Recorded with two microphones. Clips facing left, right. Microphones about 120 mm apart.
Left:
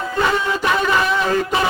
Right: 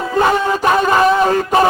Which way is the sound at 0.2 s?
45° right (ahead or behind).